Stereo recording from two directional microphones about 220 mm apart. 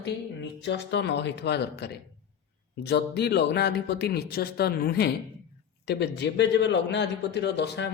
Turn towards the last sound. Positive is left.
turn(degrees=50)  # may be behind; listen again after turning